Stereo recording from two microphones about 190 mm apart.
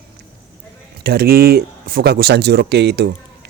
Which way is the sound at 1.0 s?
55° right (ahead or behind).